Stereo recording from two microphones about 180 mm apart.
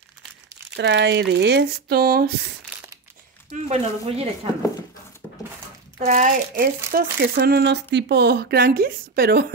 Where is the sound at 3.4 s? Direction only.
40° right (ahead or behind).